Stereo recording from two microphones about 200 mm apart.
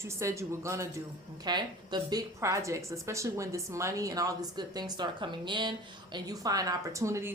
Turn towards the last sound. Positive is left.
turn(degrees=-15)  # may be behind; listen again after turning